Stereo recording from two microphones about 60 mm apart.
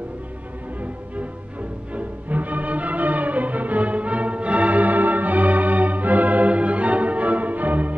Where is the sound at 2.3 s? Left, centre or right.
Right.